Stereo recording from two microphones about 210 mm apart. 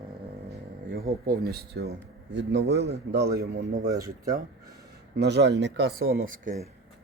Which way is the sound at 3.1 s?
50° right (ahead or behind).